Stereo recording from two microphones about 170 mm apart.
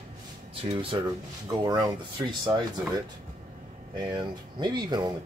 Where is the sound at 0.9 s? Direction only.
25° right (ahead or behind).